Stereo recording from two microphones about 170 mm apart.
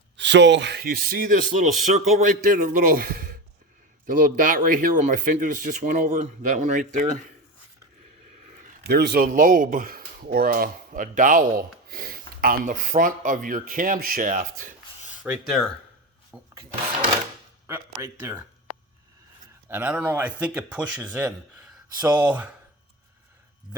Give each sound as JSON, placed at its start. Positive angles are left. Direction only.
{"t": 0.2, "sound": "speech", "side_deg": -90}
{"t": 8.9, "sound": "speech", "side_deg": -70}
{"t": 15.2, "sound": "speech", "side_deg": 0}
{"t": 17.7, "sound": "speech", "side_deg": -15}
{"t": 19.6, "sound": "speech", "side_deg": -10}